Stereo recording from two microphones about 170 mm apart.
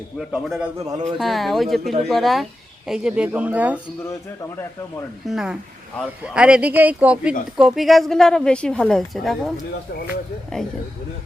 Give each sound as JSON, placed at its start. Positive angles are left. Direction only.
{"t": 0.3, "sound": "a woman's voice", "side_deg": 0}
{"t": 0.8, "sound": "a man's voice", "side_deg": -20}
{"t": 1.2, "sound": "a woman's voice", "side_deg": 0}
{"t": 5.3, "sound": "a woman's voice", "side_deg": -5}